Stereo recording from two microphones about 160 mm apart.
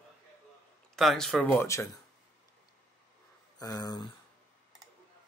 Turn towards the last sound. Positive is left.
turn(degrees=25)  # may be behind; listen again after turning